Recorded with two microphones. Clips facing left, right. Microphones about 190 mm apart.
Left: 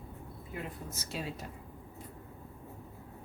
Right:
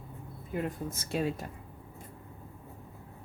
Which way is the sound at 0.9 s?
50° right (ahead or behind).